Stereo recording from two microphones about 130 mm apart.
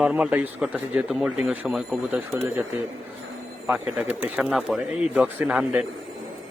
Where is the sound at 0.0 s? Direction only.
10° right (ahead or behind).